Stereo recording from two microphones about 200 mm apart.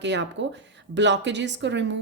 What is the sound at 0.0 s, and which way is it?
A woman's voice, 60° right (ahead or behind).